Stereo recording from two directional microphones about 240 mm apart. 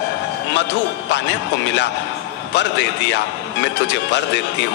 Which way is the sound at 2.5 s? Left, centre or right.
Left.